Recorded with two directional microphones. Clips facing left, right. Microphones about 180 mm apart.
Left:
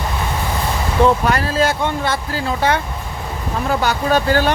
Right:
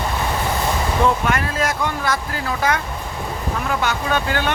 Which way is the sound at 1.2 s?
35° left (ahead or behind).